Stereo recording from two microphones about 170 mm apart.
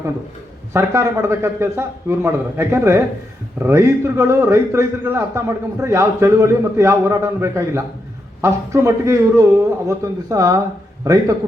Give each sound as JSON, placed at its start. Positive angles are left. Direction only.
{"t": 0.7, "sound": "a man's voice", "side_deg": -15}